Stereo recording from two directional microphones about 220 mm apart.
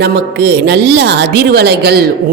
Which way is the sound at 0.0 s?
50° right (ahead or behind).